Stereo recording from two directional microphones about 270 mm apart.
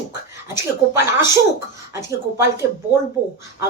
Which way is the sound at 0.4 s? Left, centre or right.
Centre.